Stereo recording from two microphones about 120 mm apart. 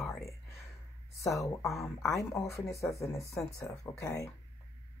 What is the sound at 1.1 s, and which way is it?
Speech, 25° left (ahead or behind).